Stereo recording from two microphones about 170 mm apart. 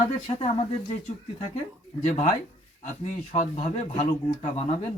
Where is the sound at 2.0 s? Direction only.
40° left (ahead or behind).